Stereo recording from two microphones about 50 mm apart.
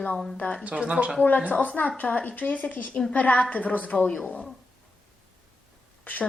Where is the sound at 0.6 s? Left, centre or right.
Right.